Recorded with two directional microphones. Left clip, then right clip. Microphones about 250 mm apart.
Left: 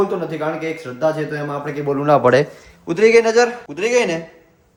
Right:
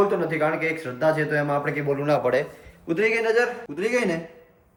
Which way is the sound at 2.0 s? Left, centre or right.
Left.